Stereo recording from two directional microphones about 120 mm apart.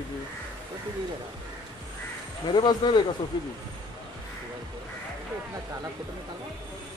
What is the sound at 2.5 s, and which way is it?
Speech, 40° left (ahead or behind).